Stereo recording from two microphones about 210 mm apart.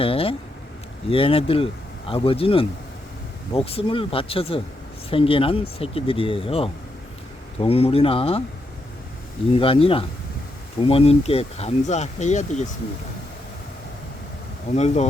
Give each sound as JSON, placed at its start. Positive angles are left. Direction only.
{"t": 0.0, "sound": "speech", "side_deg": 25}
{"t": 9.5, "sound": "speech", "side_deg": 25}
{"t": 14.8, "sound": "speech", "side_deg": 30}